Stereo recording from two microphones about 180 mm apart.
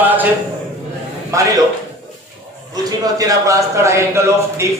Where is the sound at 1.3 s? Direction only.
20° right (ahead or behind).